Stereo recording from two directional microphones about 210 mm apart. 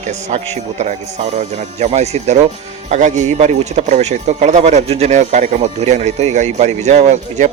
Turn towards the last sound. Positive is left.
turn(degrees=-35)  # may be behind; listen again after turning